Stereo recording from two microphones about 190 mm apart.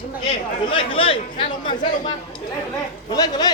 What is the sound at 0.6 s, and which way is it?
Speech, 30° left (ahead or behind).